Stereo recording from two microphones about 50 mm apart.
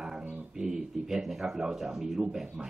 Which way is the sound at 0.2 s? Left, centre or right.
Right.